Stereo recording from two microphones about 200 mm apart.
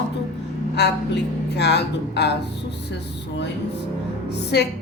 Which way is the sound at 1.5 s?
55° left (ahead or behind).